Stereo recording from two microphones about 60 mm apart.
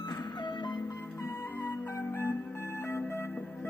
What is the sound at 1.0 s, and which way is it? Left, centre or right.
Music, left.